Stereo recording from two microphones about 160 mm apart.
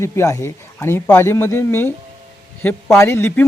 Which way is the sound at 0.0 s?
15° left (ahead or behind).